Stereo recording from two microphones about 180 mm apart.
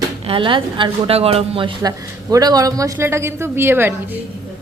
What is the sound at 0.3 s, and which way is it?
A woman's voice, 30° right (ahead or behind).